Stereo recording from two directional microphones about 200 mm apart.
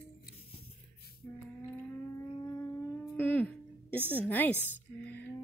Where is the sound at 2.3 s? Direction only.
15° left (ahead or behind).